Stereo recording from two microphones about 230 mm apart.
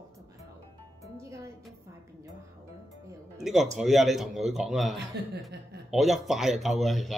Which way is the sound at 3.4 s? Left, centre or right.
Centre.